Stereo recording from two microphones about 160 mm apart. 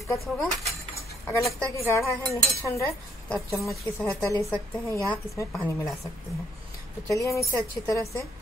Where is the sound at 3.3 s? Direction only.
Centre (ahead or behind).